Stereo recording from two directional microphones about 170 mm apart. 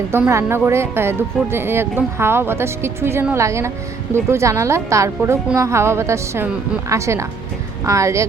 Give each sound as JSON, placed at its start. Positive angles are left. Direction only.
{"t": 0.1, "sound": "speech", "side_deg": -15}